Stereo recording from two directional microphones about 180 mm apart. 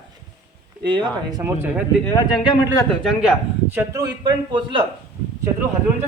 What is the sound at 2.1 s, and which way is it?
Speech, 25° left (ahead or behind).